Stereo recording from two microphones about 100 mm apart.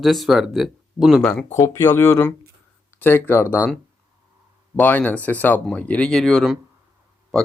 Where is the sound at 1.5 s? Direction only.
30° left (ahead or behind).